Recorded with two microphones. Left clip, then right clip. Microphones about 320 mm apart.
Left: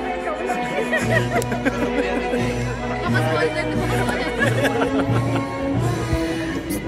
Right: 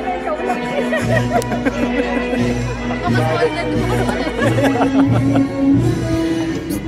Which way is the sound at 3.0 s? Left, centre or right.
Centre.